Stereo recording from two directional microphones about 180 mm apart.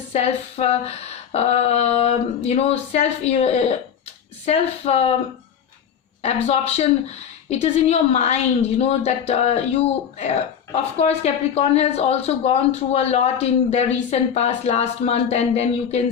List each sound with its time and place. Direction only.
0.1 s a woman's voice: 35° left (ahead or behind)
6.2 s a woman's voice: 35° left (ahead or behind)